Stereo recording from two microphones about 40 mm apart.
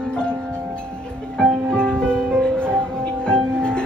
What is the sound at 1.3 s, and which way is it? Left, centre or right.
Music, centre.